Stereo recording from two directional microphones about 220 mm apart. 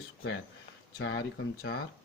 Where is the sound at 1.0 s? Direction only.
55° left (ahead or behind).